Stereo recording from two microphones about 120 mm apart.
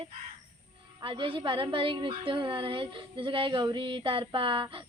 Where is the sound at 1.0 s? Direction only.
45° right (ahead or behind).